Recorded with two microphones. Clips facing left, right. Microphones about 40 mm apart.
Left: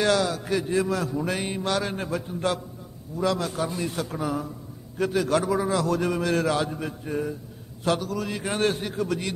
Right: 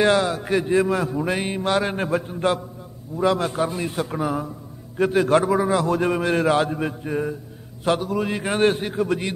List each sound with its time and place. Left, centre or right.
0.0 s a man's voice: right